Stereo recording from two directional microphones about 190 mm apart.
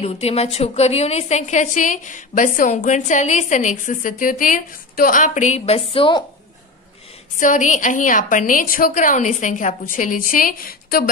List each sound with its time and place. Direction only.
0.0 s a woman's voice: 30° left (ahead or behind)
7.3 s a woman's voice: 40° left (ahead or behind)